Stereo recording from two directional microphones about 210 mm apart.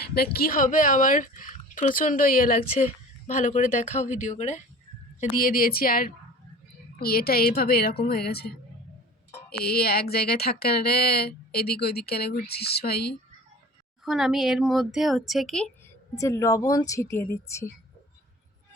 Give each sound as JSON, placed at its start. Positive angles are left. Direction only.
{"t": 0.1, "sound": "speech", "side_deg": 45}
{"t": 14.0, "sound": "speech", "side_deg": 0}
{"t": 16.1, "sound": "speech", "side_deg": 15}